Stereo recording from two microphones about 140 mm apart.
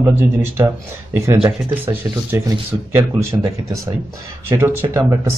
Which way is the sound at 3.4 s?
25° right (ahead or behind).